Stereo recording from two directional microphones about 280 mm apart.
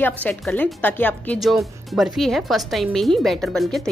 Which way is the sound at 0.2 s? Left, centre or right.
Centre.